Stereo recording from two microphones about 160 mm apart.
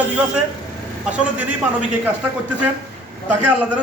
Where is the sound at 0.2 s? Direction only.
10° right (ahead or behind).